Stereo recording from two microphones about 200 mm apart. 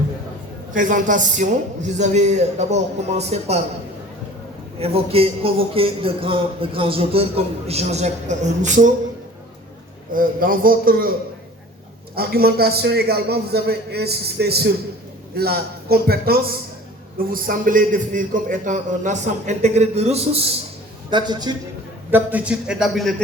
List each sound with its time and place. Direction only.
0.7 s a man's voice: 40° right (ahead or behind)
4.8 s speech: 30° right (ahead or behind)
10.1 s a man's voice: 45° right (ahead or behind)
12.1 s a man's voice: 50° right (ahead or behind); by 21.5 s 20° right (ahead or behind)
22.1 s a man's voice: 10° right (ahead or behind)